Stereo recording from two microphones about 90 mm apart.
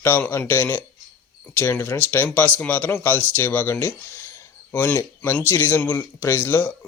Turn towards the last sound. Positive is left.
turn(degrees=20)  # may be behind; listen again after turning